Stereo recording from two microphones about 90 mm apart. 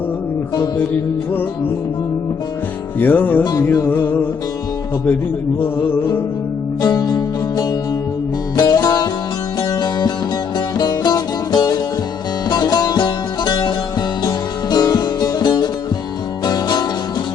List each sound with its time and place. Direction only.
3.0 s music: 20° left (ahead or behind)
6.8 s music: 45° left (ahead or behind)